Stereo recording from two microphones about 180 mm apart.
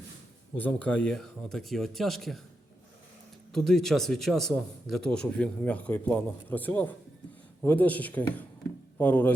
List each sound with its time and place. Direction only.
0.5 s a man's voice: 10° left (ahead or behind)
3.5 s a man's voice: centre (ahead or behind)